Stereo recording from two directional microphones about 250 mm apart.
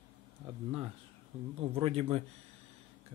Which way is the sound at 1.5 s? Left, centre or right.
Right.